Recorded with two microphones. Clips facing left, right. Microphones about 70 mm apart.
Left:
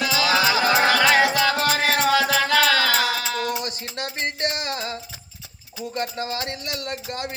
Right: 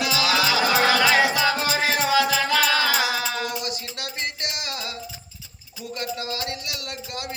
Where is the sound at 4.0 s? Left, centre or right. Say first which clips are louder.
Left 7 dB; left.